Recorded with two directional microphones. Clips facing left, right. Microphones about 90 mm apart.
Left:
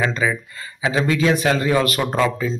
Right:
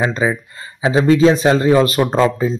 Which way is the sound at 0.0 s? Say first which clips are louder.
Right 3 dB; 25° right (ahead or behind).